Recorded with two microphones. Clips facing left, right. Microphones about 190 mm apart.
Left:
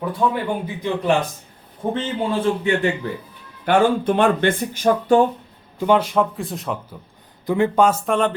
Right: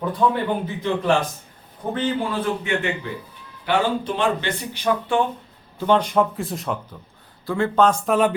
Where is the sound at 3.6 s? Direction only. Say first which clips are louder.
Left 5 dB; 55° left (ahead or behind).